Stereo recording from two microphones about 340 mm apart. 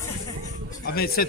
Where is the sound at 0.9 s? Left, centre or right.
Left.